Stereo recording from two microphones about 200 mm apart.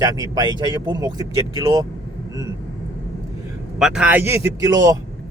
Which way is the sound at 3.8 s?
5° right (ahead or behind).